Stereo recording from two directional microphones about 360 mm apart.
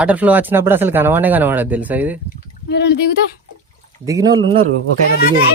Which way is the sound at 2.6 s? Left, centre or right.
Left.